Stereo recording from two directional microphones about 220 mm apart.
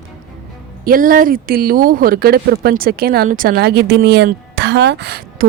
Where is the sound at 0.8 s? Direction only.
40° right (ahead or behind).